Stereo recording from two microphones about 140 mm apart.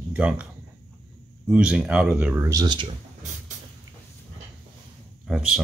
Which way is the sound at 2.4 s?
25° right (ahead or behind).